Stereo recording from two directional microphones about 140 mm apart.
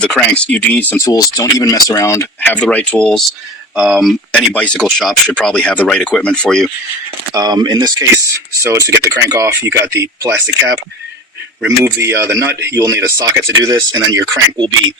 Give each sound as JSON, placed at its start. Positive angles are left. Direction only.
{"t": 0.0, "sound": "speech", "side_deg": 5}
{"t": 1.0, "sound": "speech", "side_deg": 25}
{"t": 3.8, "sound": "speech", "side_deg": -5}
{"t": 7.3, "sound": "speech", "side_deg": -30}